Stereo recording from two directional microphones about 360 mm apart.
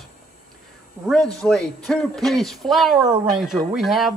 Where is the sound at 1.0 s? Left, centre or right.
Centre.